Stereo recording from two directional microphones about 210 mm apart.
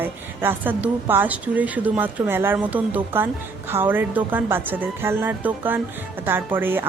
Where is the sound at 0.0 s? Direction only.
10° right (ahead or behind).